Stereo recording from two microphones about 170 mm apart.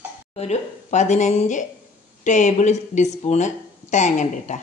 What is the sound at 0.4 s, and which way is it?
Speech, 40° left (ahead or behind).